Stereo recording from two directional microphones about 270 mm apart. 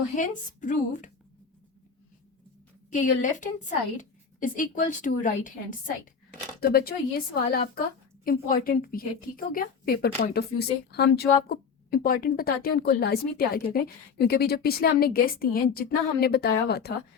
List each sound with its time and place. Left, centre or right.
0.2 s a woman's voice: left
2.9 s a woman's voice: left